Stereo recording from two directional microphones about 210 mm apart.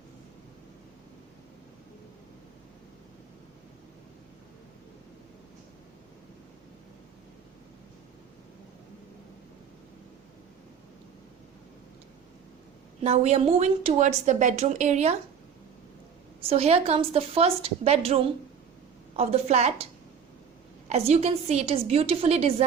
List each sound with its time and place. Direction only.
13.0 s speech: 30° right (ahead or behind)
16.4 s a woman's voice: 30° right (ahead or behind)
20.9 s a woman's voice: 30° right (ahead or behind)